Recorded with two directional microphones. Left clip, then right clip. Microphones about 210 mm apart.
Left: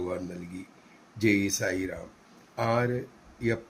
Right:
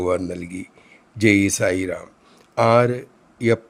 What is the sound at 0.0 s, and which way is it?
Speech, 55° right (ahead or behind).